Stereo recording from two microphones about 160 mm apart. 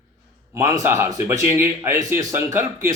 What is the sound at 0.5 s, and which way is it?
Speech, 20° right (ahead or behind).